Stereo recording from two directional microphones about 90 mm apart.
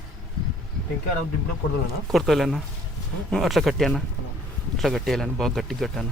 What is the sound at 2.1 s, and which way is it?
Speech, centre (ahead or behind).